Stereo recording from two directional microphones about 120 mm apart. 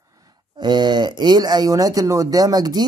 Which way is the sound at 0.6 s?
40° right (ahead or behind).